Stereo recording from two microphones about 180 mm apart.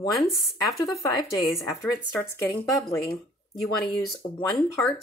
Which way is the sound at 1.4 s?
20° left (ahead or behind).